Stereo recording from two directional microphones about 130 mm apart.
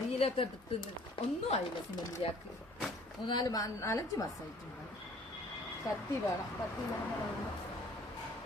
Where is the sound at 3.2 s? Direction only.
35° left (ahead or behind).